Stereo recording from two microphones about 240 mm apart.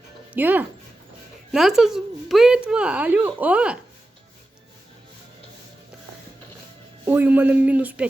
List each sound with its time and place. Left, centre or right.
0.3 s a man's voice: centre
7.0 s a man's voice: centre